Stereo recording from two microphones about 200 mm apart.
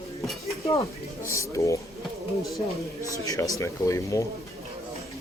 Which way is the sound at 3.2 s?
15° left (ahead or behind).